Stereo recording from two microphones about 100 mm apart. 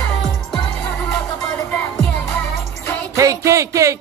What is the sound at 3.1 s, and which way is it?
Music, 30° right (ahead or behind).